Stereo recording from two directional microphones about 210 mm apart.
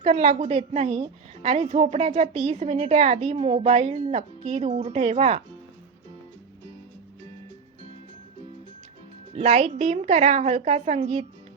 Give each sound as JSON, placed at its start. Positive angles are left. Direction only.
{"t": 0.0, "sound": "a woman's voice", "side_deg": -30}
{"t": 9.3, "sound": "a woman's voice", "side_deg": -30}